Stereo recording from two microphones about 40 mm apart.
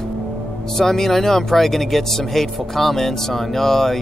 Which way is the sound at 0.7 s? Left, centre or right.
Centre.